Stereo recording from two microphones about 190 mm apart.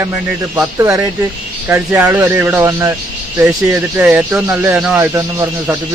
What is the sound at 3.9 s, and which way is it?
Speech, 10° right (ahead or behind).